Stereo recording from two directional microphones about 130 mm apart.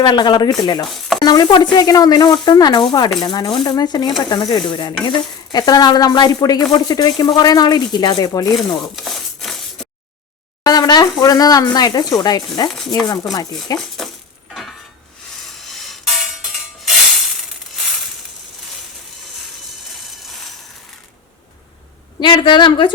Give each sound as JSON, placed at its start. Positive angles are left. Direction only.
{"t": 0.0, "sound": "speech", "side_deg": 35}
{"t": 9.0, "sound": "a sound", "side_deg": 0}
{"t": 10.6, "sound": "speech", "side_deg": 30}
{"t": 14.0, "sound": "a sound", "side_deg": 0}
{"t": 15.8, "sound": "music", "side_deg": 0}
{"t": 22.2, "sound": "speech", "side_deg": 35}